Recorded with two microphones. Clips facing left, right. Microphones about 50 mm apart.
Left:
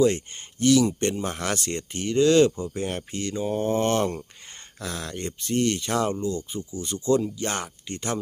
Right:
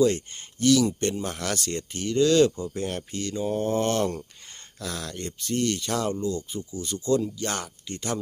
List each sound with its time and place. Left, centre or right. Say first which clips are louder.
0.0 s speech: left 1 dB; centre
6.6 s speech: left 1 dB; centre
6.8 s speech: left 2 dB; centre